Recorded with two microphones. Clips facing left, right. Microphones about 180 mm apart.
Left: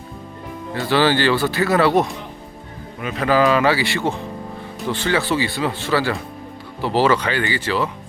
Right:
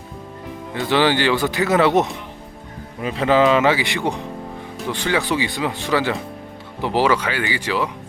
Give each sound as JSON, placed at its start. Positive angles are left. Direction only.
{"t": 0.7, "sound": "speech", "side_deg": -20}